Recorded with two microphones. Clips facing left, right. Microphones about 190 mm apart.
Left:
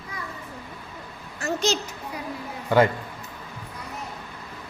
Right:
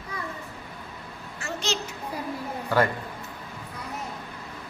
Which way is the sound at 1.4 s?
40° left (ahead or behind).